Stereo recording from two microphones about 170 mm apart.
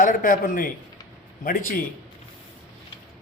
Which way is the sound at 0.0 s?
55° left (ahead or behind).